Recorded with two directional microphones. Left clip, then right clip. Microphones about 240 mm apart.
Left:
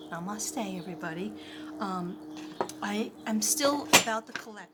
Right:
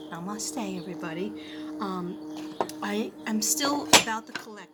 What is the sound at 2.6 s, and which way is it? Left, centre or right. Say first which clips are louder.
Speech: right 2 dB; centre.